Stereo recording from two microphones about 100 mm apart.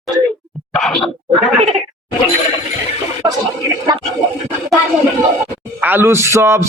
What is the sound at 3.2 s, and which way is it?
Speech, 35° right (ahead or behind).